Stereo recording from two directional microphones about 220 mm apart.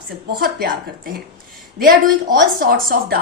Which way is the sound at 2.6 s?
40° right (ahead or behind).